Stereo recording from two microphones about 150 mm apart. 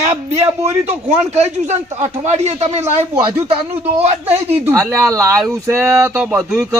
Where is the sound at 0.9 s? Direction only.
45° right (ahead or behind).